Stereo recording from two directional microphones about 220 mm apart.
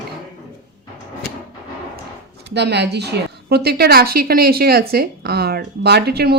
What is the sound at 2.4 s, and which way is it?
A woman's voice, 50° right (ahead or behind).